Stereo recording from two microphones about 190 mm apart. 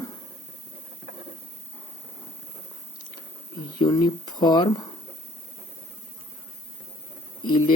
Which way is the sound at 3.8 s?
20° left (ahead or behind).